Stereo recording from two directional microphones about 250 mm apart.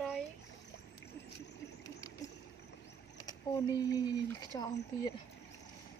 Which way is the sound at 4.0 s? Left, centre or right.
Centre.